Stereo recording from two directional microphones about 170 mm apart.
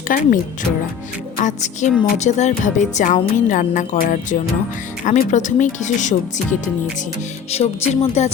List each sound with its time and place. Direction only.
0.1 s speech: 55° left (ahead or behind)
1.4 s speech: 45° left (ahead or behind)
7.5 s speech: 40° left (ahead or behind)